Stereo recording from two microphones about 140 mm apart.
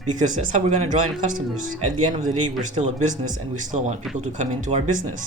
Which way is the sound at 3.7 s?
55° right (ahead or behind).